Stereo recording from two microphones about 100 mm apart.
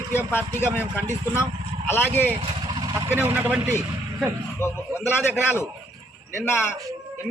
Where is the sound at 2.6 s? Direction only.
45° right (ahead or behind).